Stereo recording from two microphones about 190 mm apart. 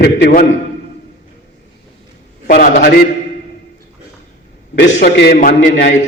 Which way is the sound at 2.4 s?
55° left (ahead or behind).